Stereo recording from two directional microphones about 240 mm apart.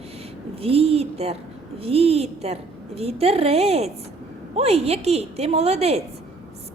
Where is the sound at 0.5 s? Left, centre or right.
Right.